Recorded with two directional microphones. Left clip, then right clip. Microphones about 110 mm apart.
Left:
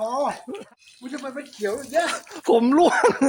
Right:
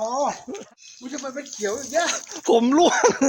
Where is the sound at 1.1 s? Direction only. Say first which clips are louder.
Right 1 dB; 15° right (ahead or behind).